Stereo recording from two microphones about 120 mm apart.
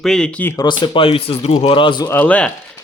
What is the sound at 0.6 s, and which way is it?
Speech, 40° left (ahead or behind).